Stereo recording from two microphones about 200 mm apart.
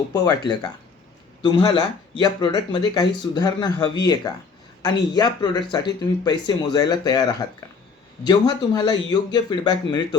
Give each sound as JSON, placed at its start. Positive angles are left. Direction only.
{"t": 0.1, "sound": "speech", "side_deg": 20}